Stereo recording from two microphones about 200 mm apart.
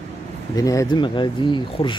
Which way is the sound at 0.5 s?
15° left (ahead or behind).